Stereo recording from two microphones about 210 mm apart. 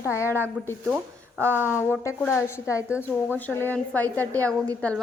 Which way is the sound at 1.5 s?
10° right (ahead or behind).